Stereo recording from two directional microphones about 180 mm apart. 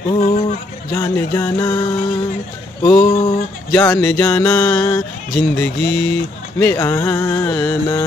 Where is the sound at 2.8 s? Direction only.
25° left (ahead or behind).